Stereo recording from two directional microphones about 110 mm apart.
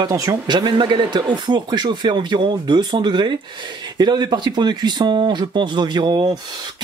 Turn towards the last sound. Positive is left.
turn(degrees=-50)  # may be behind; listen again after turning